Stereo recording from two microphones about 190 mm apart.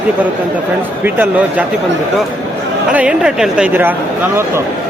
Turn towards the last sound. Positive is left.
turn(degrees=-10)  # may be behind; listen again after turning